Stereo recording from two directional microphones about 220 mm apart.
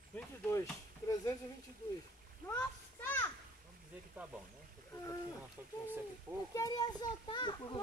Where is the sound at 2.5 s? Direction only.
10° left (ahead or behind).